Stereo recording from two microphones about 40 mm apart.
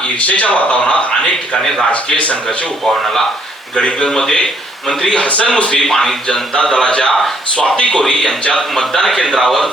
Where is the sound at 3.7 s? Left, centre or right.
Left.